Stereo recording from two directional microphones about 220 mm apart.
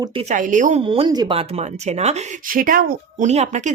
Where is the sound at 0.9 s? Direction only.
20° right (ahead or behind).